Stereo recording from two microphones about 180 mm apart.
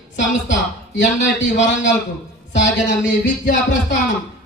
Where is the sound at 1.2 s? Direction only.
90° left.